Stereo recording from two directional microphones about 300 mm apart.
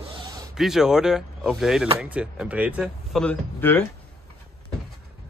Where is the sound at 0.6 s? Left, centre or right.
Centre.